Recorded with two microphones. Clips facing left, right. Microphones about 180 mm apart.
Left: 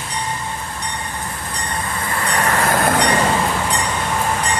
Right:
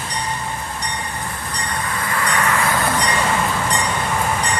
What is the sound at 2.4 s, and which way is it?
Vehicle, 40° left (ahead or behind).